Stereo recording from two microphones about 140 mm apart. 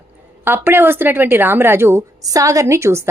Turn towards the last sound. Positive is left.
turn(degrees=-20)  # may be behind; listen again after turning